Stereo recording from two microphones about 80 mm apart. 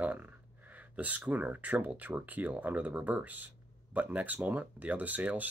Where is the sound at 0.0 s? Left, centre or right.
Right.